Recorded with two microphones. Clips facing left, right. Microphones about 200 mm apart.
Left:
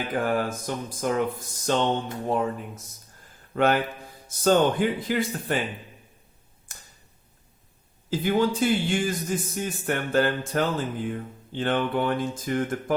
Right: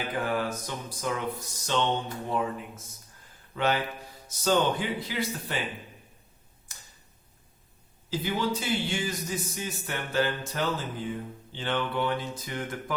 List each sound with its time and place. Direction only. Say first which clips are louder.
0.1 s a man's voice: left 4 dB; 45° left (ahead or behind)
3.5 s a man's voice: left 5 dB; 55° left (ahead or behind)
6.7 s tick: left 3 dB; 50° left (ahead or behind)
8.1 s a man's voice: left 6 dB; 50° left (ahead or behind)